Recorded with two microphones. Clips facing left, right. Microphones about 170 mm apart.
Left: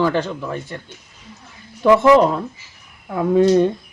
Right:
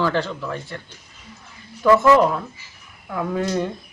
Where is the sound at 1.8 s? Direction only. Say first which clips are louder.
Left 3 dB; 20° left (ahead or behind).